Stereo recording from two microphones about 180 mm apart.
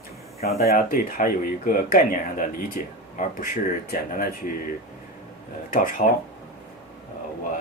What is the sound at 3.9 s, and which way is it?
Speech, 50° left (ahead or behind).